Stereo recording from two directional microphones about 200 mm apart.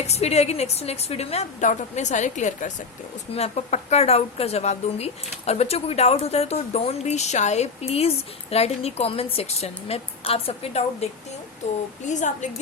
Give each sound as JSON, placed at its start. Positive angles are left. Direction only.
{"t": 0.0, "sound": "speech", "side_deg": 30}